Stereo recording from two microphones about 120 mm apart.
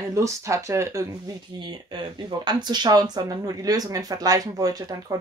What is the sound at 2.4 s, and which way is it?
Speech, 40° right (ahead or behind).